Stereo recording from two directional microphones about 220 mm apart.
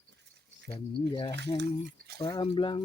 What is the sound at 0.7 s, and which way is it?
Speech, 20° left (ahead or behind).